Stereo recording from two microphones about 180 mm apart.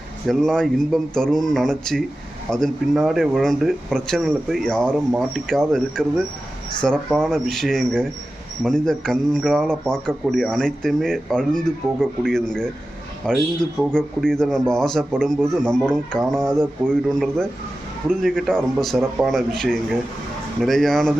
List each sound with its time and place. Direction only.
0.3 s speech: centre (ahead or behind)